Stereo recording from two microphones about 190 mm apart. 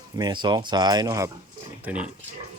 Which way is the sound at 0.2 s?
20° right (ahead or behind).